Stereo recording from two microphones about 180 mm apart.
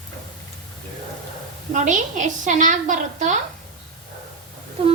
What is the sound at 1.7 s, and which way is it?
A woman's voice, 45° right (ahead or behind).